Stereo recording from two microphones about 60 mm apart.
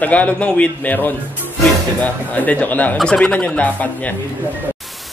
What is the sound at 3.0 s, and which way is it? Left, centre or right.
A man's voice, centre.